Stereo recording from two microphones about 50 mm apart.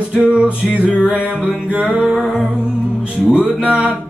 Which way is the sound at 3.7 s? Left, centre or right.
Right.